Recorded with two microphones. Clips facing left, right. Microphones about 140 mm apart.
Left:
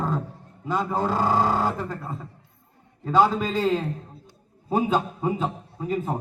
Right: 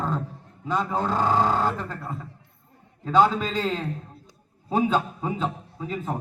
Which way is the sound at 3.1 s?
5° left (ahead or behind).